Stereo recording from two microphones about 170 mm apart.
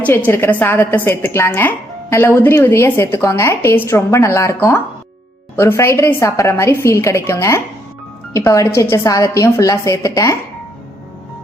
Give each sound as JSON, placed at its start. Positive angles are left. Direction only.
{"t": 0.3, "sound": "a woman's voice", "side_deg": 15}